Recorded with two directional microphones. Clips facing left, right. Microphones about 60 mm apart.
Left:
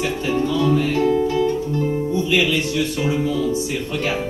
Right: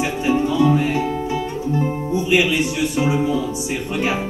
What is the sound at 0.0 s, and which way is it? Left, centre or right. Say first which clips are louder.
Music: right 2 dB; centre.